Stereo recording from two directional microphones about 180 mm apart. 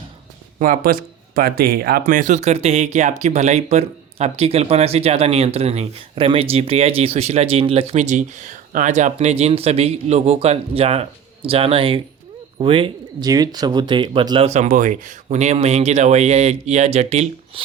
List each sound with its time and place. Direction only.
0.6 s speech: 50° right (ahead or behind)